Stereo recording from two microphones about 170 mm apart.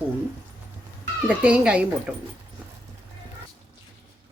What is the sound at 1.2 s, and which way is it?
Speech, 5° right (ahead or behind).